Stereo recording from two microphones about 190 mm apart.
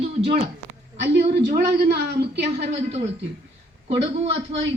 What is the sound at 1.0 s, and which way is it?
A woman's voice, 65° right (ahead or behind).